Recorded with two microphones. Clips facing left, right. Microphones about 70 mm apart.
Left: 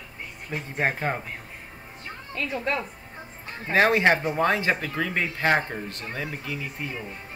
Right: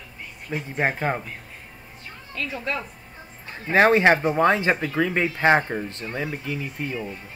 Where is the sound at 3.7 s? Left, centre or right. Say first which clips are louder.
Right 3 dB; right.